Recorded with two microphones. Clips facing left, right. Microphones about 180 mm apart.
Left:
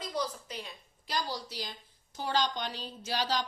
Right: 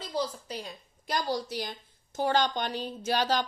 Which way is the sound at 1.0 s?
50° right (ahead or behind).